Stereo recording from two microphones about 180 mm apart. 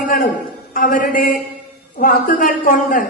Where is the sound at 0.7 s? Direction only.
50° left (ahead or behind).